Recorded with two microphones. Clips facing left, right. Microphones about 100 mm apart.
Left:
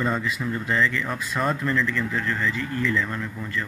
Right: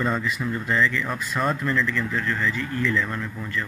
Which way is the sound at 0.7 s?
35° left (ahead or behind).